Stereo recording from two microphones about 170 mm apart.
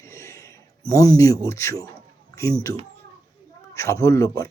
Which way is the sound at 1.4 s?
15° left (ahead or behind).